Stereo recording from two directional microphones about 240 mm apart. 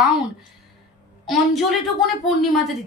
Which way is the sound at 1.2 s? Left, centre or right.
Centre.